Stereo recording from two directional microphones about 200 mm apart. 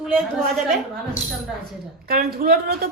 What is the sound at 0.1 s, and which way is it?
Speech, centre (ahead or behind).